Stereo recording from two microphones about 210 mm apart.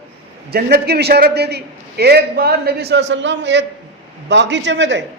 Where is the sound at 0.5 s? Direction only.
50° right (ahead or behind).